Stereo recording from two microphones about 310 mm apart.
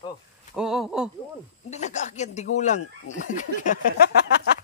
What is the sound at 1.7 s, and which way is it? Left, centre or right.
Speech, left.